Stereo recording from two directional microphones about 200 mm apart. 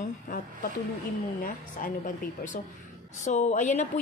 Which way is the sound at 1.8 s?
45° left (ahead or behind).